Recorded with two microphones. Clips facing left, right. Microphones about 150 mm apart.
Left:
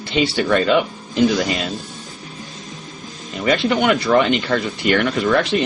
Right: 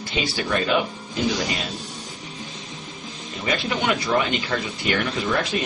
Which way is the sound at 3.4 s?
75° left (ahead or behind).